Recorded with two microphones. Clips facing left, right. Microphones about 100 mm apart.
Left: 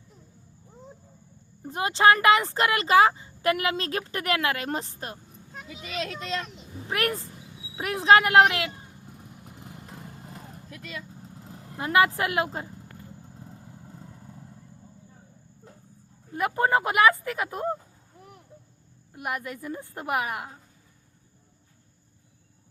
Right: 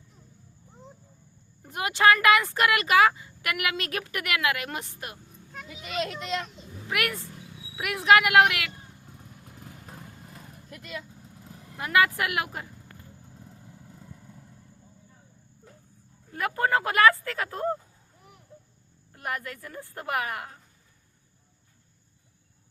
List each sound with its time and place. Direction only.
1.6 s speech: 25° left (ahead or behind)
6.8 s speech: 35° left (ahead or behind)
7.3 s wild animals: centre (ahead or behind)
7.8 s speech: 30° left (ahead or behind)
9.1 s vehicle: 20° left (ahead or behind)
11.2 s speech: 30° left (ahead or behind)
16.3 s speech: 20° left (ahead or behind)
19.1 s speech: 20° left (ahead or behind)